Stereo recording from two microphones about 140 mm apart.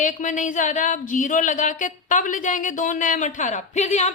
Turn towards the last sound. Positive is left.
turn(degrees=55)  # may be behind; listen again after turning